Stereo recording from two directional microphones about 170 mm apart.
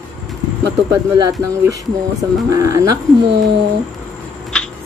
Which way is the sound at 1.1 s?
20° right (ahead or behind).